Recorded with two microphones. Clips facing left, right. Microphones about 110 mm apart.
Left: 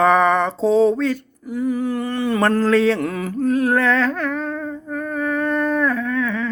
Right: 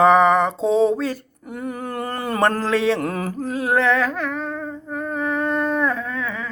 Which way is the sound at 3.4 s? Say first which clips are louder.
Left 3 dB; 25° right (ahead or behind).